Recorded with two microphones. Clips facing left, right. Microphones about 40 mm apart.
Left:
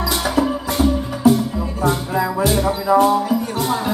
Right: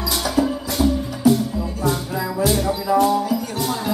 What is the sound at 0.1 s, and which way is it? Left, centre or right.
Music, left.